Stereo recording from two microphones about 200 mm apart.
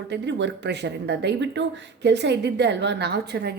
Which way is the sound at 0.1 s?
60° right (ahead or behind).